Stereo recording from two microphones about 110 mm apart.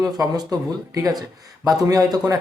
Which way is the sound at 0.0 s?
35° right (ahead or behind).